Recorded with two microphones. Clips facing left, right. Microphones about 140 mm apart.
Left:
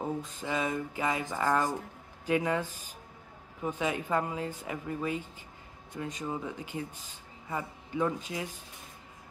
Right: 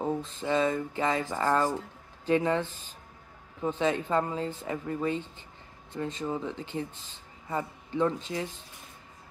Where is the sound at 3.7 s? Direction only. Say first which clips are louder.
Right 3 dB; 10° left (ahead or behind).